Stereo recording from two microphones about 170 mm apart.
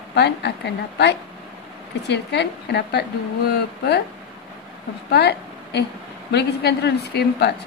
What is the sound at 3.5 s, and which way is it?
Speech, 70° left (ahead or behind).